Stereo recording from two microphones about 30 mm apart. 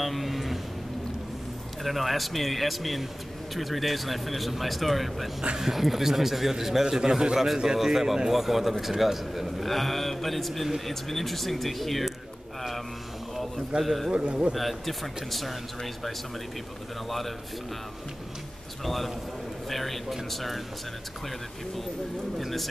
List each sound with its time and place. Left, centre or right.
0.0 s vehicle: centre
1.8 s a man's voice: centre
9.6 s speech: centre
13.8 s speech: centre
14.2 s speech: right
14.5 s speech: centre
18.9 s speech: centre
22.4 s speech: centre